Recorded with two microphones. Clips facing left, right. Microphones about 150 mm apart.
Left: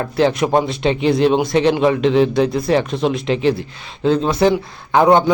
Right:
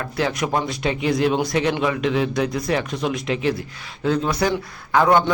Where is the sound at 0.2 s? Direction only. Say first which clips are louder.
Left 7 dB; 30° left (ahead or behind).